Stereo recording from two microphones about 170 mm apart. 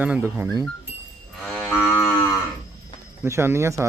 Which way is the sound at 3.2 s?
15° right (ahead or behind).